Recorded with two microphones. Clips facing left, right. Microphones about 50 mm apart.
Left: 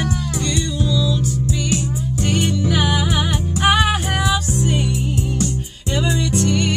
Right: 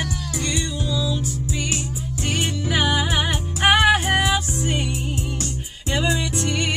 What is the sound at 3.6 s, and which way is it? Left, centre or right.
Music, right.